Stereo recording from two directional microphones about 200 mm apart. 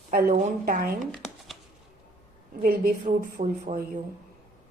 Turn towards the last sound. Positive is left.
turn(degrees=-35)  # may be behind; listen again after turning